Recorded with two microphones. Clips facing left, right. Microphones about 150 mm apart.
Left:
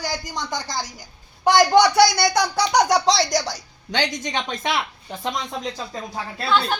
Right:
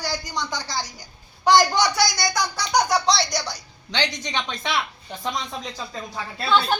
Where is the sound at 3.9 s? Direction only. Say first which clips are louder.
Left 3 dB; 50° left (ahead or behind).